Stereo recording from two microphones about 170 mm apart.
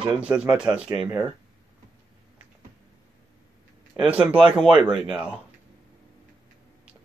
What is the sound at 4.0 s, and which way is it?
Speech, 10° right (ahead or behind).